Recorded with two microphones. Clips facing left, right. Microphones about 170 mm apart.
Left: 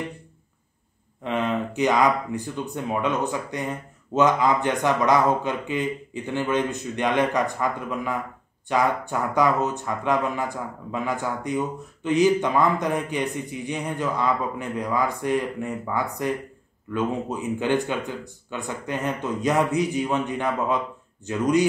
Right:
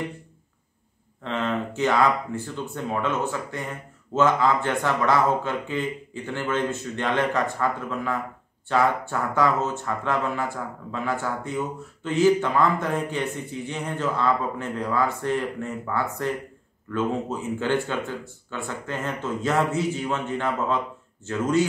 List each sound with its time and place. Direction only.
1.2 s speech: 15° left (ahead or behind)